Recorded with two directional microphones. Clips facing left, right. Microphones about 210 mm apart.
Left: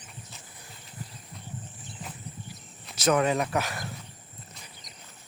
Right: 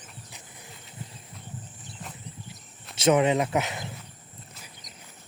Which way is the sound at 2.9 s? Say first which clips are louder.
Right 3 dB; 25° right (ahead or behind).